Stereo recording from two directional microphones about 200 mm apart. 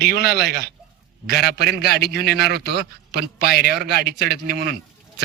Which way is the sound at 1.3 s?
55° left (ahead or behind).